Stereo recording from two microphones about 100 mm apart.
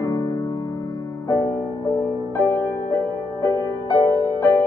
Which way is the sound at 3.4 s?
30° left (ahead or behind).